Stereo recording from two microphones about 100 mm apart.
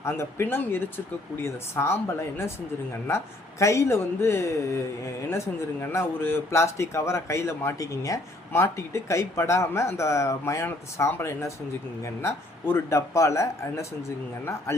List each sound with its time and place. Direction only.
0.0 s speech: 25° left (ahead or behind)
3.6 s speech: 30° left (ahead or behind)